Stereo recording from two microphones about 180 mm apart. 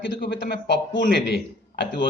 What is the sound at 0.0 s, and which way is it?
A man's voice, 80° left.